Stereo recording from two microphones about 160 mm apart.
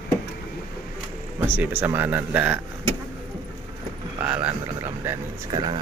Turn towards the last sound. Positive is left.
turn(degrees=-30)  # may be behind; listen again after turning